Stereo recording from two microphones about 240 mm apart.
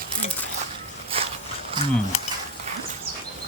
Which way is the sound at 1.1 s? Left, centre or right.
Right.